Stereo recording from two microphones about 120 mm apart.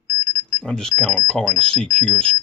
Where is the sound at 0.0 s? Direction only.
40° left (ahead or behind).